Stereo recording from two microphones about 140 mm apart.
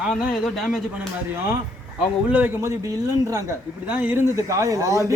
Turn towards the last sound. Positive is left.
turn(degrees=-20)  # may be behind; listen again after turning